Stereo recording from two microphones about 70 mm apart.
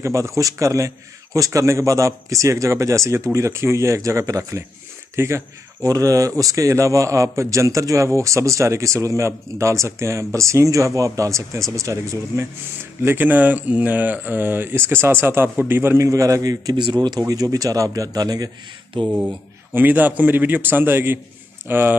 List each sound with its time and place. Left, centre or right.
0.0 s a man's voice: right
5.9 s a man's voice: right
13.0 s a man's voice: right
16.1 s a man's voice: right
17.3 s a man's voice: right
19.0 s a man's voice: right